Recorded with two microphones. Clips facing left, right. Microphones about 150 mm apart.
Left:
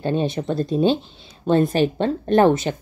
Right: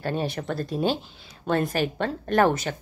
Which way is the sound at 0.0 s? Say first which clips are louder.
Left 6 dB; 20° left (ahead or behind).